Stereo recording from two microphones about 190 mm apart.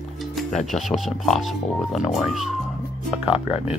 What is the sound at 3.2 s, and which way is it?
Speech, 30° left (ahead or behind).